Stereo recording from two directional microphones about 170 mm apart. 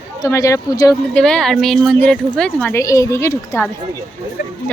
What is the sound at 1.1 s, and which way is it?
A woman's voice, 5° left (ahead or behind).